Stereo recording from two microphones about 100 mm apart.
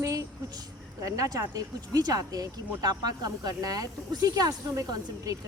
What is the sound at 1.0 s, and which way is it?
Speech, 35° right (ahead or behind).